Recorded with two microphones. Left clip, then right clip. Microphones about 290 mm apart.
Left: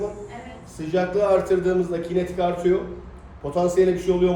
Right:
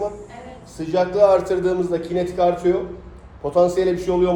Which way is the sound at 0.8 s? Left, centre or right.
Centre.